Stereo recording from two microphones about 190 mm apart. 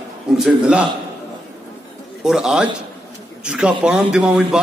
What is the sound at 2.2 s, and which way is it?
A man's voice, centre (ahead or behind).